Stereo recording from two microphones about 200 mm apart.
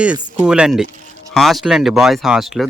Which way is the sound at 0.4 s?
5° right (ahead or behind).